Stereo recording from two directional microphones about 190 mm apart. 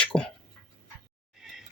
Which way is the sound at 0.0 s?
5° left (ahead or behind).